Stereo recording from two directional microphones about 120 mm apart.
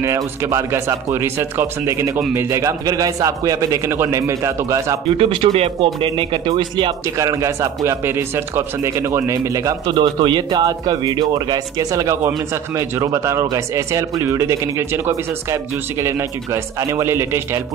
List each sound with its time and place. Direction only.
0.0 s speech: 25° right (ahead or behind)
5.1 s speech: 50° right (ahead or behind)
7.2 s speech: 25° right (ahead or behind)
9.9 s speech: 40° right (ahead or behind); by 15.1 s 25° right (ahead or behind)
16.9 s speech: 20° right (ahead or behind)